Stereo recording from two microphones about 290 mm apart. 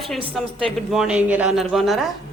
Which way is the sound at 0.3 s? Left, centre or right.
Centre.